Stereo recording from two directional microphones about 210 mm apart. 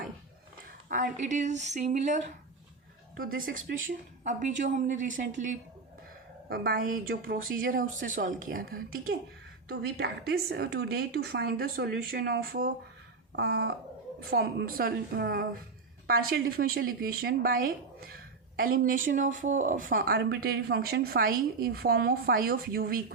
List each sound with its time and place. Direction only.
0.9 s speech: 40° right (ahead or behind)
6.5 s speech: 45° right (ahead or behind)